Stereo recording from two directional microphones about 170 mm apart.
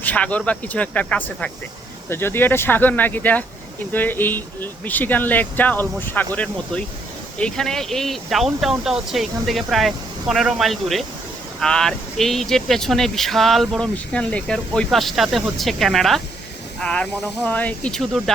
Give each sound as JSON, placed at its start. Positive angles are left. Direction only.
{"t": 0.0, "sound": "speech", "side_deg": 10}